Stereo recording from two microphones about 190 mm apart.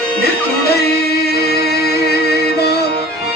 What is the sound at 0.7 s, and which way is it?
Music, 55° left (ahead or behind).